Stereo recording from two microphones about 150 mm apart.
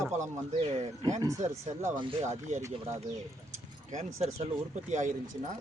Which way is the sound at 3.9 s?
50° right (ahead or behind).